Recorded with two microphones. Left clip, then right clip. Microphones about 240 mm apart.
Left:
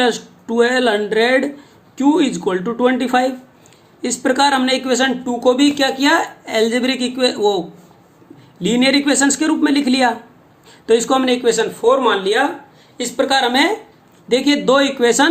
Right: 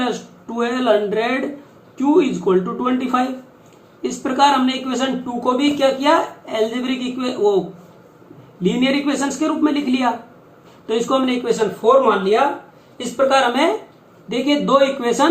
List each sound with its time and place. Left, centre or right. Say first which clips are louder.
0.0 s speech: left 6 dB; left
8.6 s a man's voice: left 4 dB; left